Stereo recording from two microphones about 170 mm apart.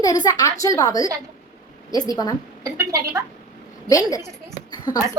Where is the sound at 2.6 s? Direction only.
20° right (ahead or behind).